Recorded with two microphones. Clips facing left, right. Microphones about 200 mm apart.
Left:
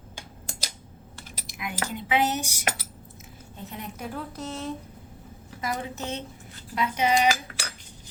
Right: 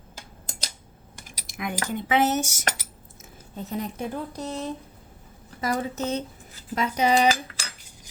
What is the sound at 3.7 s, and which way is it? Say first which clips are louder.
Speech: right 9 dB; 35° right (ahead or behind).